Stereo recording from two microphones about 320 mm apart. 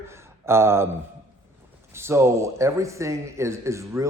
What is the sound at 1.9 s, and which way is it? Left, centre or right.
A man's voice, centre.